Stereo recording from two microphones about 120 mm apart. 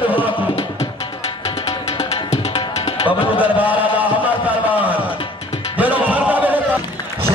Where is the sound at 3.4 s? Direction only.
15° right (ahead or behind).